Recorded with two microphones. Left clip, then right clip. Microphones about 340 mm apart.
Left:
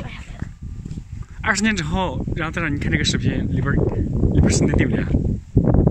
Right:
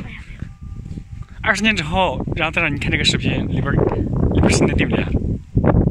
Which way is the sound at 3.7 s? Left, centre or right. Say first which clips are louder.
Right 4 dB; right.